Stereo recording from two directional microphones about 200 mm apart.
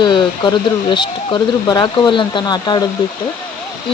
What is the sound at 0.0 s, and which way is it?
Speech, 20° left (ahead or behind).